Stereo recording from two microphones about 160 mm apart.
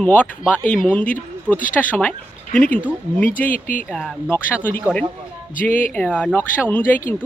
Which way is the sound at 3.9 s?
5° left (ahead or behind).